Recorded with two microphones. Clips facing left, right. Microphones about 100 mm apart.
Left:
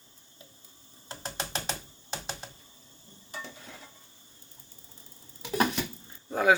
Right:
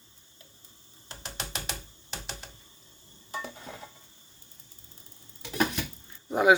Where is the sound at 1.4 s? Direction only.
30° left (ahead or behind).